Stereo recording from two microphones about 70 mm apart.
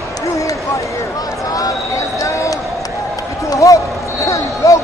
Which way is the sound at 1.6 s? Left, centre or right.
Left.